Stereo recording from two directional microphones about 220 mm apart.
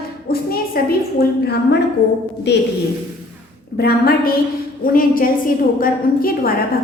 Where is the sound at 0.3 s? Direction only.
45° left (ahead or behind).